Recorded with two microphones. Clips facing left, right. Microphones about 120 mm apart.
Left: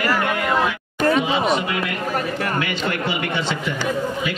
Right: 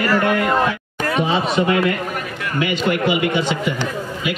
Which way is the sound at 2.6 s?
15° right (ahead or behind).